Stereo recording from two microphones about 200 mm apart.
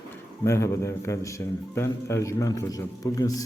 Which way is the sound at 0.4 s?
15° left (ahead or behind).